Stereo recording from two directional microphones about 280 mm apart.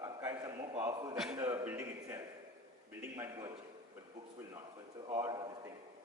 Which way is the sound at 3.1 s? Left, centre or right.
Centre.